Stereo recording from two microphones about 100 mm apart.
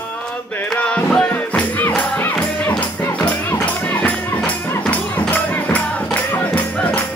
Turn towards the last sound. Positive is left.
turn(degrees=15)  # may be behind; listen again after turning